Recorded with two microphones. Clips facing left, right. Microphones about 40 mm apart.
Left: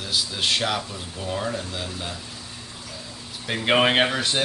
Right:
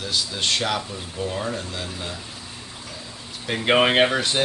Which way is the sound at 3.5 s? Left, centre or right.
Centre.